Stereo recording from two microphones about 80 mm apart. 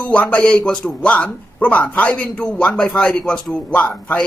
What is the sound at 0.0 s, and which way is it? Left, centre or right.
A man's voice, centre.